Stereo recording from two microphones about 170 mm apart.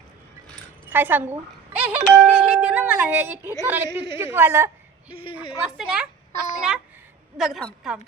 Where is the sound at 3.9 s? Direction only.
80° right.